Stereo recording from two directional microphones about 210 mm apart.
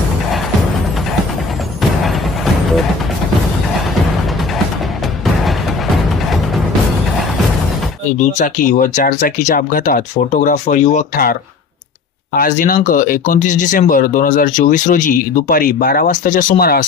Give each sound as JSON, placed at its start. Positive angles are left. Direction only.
{"t": 1.8, "sound": "a sound", "side_deg": 0}
{"t": 8.2, "sound": "speech", "side_deg": 35}
{"t": 12.4, "sound": "speech", "side_deg": 40}